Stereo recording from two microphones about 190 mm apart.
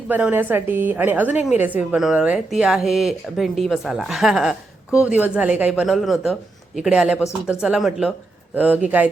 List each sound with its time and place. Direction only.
0.1 s a woman's voice: 10° right (ahead or behind)